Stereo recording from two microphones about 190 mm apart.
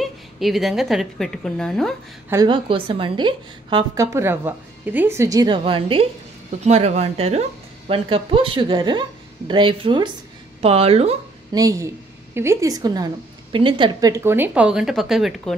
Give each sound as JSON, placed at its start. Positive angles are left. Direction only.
{"t": 0.0, "sound": "a woman's voice", "side_deg": 0}
{"t": 2.4, "sound": "a woman's voice", "side_deg": -25}
{"t": 11.5, "sound": "a woman's voice", "side_deg": -15}